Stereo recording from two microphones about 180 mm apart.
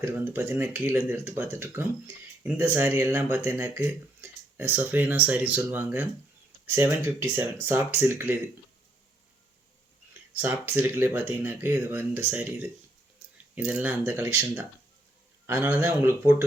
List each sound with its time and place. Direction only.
0.0 s speech: 10° right (ahead or behind)
10.3 s speech: 10° right (ahead or behind)